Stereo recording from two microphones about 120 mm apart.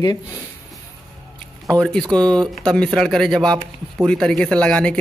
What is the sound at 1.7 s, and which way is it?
Speech, 5° left (ahead or behind).